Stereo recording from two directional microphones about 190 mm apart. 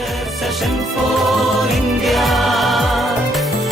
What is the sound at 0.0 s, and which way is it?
Music, centre (ahead or behind).